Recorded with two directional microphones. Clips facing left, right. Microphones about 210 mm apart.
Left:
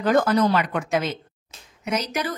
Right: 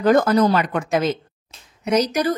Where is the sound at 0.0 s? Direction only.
40° right (ahead or behind).